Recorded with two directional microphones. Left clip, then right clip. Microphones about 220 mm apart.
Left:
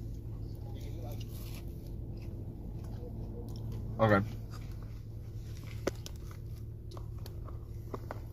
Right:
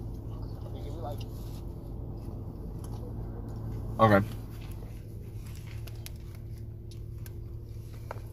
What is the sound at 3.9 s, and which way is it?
Speech, 40° right (ahead or behind).